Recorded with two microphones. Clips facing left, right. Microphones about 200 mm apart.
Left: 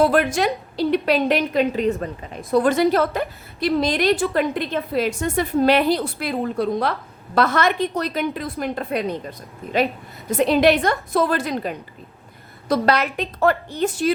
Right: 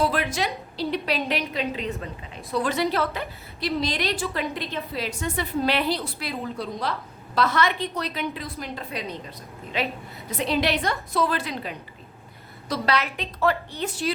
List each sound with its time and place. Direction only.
0.0 s a woman's voice: 50° left (ahead or behind)
10.2 s a woman's voice: 50° left (ahead or behind)